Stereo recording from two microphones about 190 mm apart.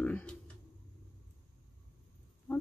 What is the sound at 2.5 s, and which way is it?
Oink, 10° left (ahead or behind).